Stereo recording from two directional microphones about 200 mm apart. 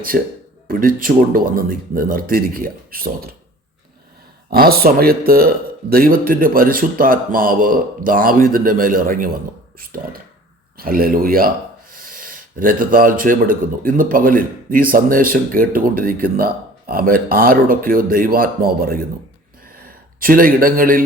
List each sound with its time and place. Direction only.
0.1 s speech: 50° right (ahead or behind)
4.4 s speech: 50° right (ahead or behind)